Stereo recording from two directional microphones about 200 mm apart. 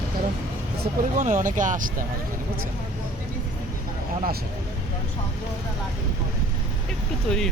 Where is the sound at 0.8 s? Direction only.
40° right (ahead or behind).